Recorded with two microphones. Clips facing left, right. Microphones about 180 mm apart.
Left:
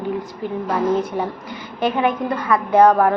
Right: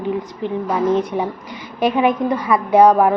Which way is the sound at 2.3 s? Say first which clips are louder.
Right 2 dB; 20° right (ahead or behind).